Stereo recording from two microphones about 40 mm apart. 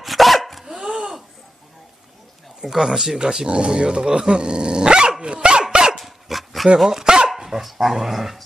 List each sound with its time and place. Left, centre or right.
0.0 s dog: centre
0.7 s a sound: centre
2.6 s speech: centre
5.2 s dog: right
5.9 s dog: centre
6.8 s speech: centre